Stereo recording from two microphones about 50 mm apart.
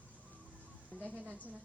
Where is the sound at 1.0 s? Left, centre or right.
Right.